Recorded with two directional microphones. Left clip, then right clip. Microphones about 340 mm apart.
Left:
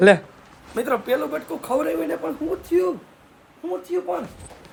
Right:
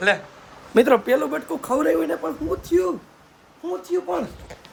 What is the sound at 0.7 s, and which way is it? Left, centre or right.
Speech, right.